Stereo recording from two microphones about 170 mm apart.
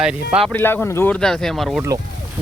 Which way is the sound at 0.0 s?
5° right (ahead or behind).